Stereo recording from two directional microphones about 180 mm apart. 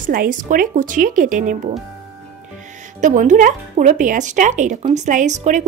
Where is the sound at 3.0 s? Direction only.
45° right (ahead or behind).